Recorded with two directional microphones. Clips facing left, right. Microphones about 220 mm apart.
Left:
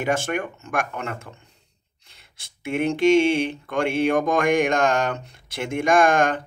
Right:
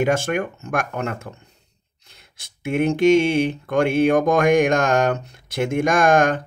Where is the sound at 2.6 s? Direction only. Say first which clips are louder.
Right 3 dB; 40° right (ahead or behind).